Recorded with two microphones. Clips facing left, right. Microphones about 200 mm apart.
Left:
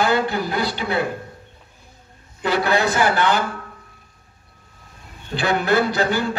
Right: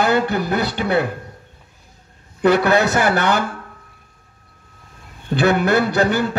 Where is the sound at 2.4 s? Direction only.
50° right (ahead or behind).